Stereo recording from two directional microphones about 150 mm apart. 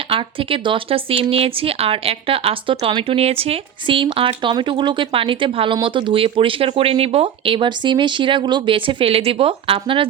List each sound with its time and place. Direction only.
0.1 s speech: 35° right (ahead or behind)